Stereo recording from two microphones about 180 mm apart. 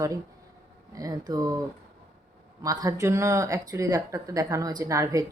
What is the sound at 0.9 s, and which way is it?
A woman's voice, 20° right (ahead or behind).